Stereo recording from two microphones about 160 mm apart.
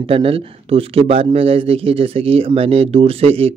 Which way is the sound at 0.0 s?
35° right (ahead or behind).